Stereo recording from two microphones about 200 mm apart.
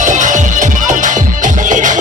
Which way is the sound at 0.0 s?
40° right (ahead or behind).